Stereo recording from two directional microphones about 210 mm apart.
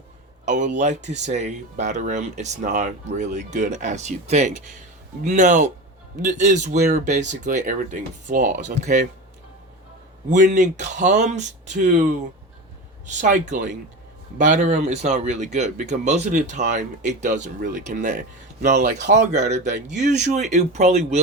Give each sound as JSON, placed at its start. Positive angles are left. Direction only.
{"t": 0.4, "sound": "speech", "side_deg": -35}
{"t": 10.2, "sound": "speech", "side_deg": -40}
{"t": 19.1, "sound": "speech", "side_deg": -35}